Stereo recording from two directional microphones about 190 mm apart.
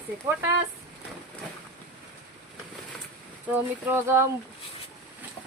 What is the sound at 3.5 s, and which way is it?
Speech, 10° right (ahead or behind).